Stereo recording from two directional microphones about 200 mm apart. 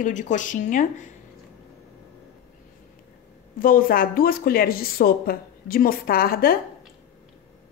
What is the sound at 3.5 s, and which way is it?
Speech, 45° left (ahead or behind).